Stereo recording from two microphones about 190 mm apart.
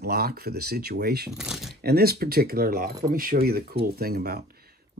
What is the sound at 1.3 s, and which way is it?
Speech, centre (ahead or behind).